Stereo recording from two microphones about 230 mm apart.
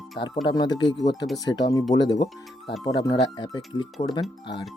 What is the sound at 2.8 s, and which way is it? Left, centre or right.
Speech, centre.